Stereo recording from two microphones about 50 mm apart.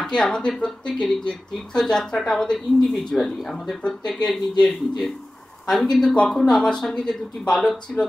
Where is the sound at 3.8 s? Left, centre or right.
Centre.